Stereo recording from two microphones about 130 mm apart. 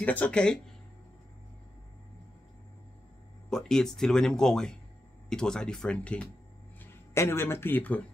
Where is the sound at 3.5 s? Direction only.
5° left (ahead or behind).